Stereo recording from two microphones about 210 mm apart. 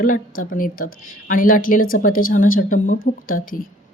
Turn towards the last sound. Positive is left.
turn(degrees=40)  # may be behind; listen again after turning